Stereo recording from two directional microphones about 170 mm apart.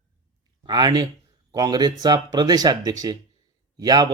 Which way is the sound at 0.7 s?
25° right (ahead or behind).